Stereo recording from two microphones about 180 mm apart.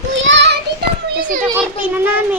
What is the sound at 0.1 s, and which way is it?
Child singing, 90° right.